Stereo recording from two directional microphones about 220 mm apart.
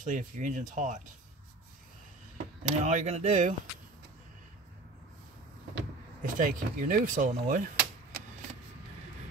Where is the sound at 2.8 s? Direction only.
30° right (ahead or behind).